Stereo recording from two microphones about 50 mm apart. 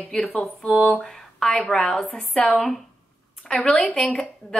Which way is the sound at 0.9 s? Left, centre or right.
Centre.